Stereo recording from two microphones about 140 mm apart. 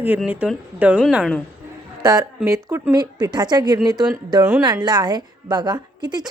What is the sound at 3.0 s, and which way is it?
A woman's voice, 30° right (ahead or behind).